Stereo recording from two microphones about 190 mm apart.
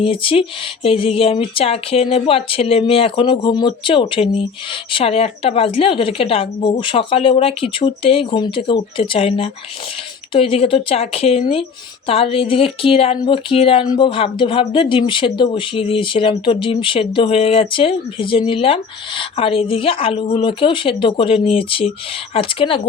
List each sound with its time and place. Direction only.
0.0 s speech: 30° left (ahead or behind)